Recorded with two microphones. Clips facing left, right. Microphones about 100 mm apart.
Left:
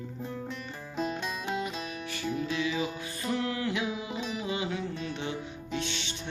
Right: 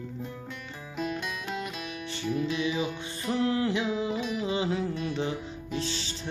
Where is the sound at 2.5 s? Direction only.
20° right (ahead or behind).